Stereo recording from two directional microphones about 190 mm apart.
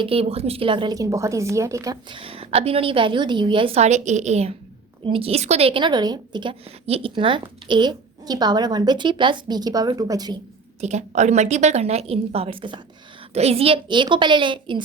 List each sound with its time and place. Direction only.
0.0 s a woman's voice: 30° right (ahead or behind)
10.8 s a woman's voice: 35° right (ahead or behind)